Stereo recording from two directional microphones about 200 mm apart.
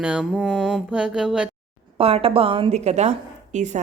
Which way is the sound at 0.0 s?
5° right (ahead or behind).